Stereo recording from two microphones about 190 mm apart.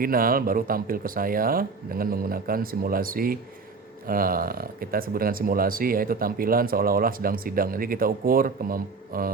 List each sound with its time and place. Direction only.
0.0 s speech: 50° right (ahead or behind)